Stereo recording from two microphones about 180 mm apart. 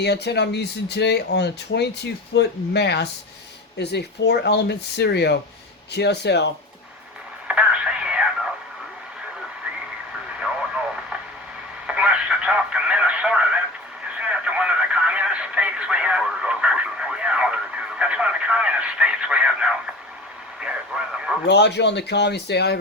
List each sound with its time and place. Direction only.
0.0 s speech: 70° left (ahead or behind)
7.4 s radio: 5° right (ahead or behind)
11.9 s a sound: 5° right (ahead or behind)
20.6 s radio: 5° right (ahead or behind)
21.4 s speech: 75° left (ahead or behind)